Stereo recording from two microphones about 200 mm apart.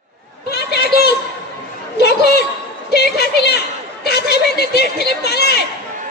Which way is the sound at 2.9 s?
55° left (ahead or behind).